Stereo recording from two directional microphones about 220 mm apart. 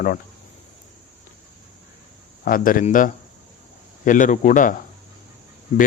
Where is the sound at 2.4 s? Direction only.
40° left (ahead or behind).